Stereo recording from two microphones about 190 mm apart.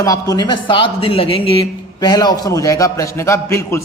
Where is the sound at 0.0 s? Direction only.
20° left (ahead or behind).